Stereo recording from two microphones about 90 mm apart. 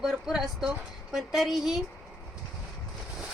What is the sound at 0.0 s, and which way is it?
A woman's voice, 5° right (ahead or behind).